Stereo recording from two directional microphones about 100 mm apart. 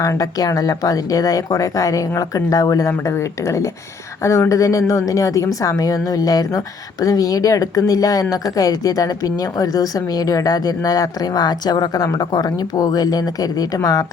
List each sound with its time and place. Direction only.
0.0 s speech: 35° left (ahead or behind)